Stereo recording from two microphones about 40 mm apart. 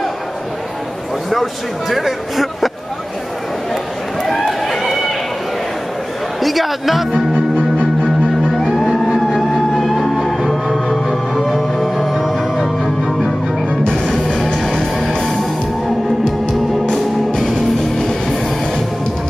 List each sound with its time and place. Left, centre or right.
1.3 s speech: centre
4.2 s run: centre
6.4 s speech: centre
8.0 s music: centre
8.7 s vehicle: centre
10.7 s music: centre
12.8 s music: centre
17.9 s music: centre